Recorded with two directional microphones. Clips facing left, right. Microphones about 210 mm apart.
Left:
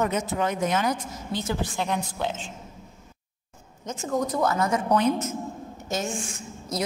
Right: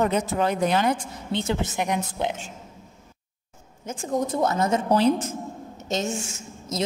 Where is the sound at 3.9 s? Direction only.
25° right (ahead or behind).